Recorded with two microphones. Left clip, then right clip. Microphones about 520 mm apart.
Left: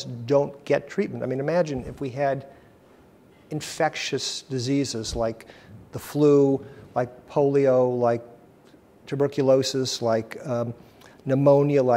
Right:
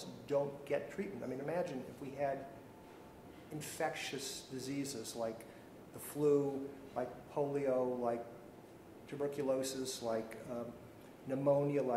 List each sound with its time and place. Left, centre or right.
0.0 s a man's voice: left
3.5 s a man's voice: left